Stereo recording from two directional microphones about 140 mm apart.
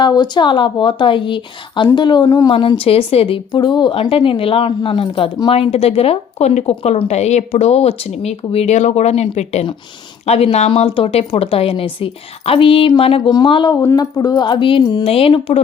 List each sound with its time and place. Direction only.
0.0 s a woman's voice: 30° left (ahead or behind)
2.5 s a woman's voice: 40° left (ahead or behind)